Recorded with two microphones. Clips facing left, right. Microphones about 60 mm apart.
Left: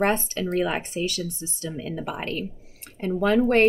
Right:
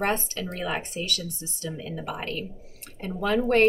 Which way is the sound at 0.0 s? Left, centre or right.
Left.